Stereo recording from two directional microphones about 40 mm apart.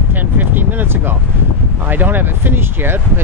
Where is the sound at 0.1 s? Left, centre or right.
Right.